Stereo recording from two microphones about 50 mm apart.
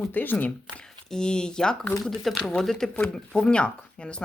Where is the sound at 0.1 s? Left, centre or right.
Left.